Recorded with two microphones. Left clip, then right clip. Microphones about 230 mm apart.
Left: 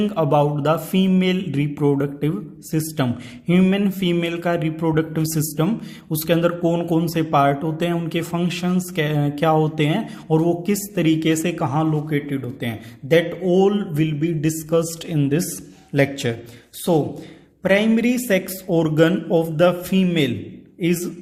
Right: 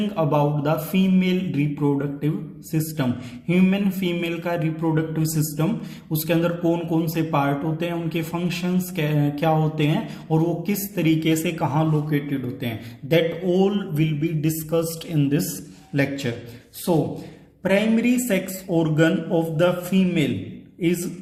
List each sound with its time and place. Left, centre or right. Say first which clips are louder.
0.0 s a man's voice: left 3 dB; left